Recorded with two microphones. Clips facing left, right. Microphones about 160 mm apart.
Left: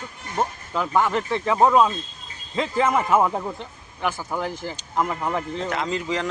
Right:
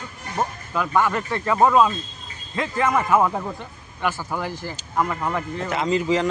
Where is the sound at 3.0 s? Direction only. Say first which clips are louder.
Even; 5° left (ahead or behind).